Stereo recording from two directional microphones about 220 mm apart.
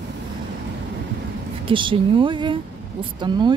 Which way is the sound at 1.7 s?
20° right (ahead or behind).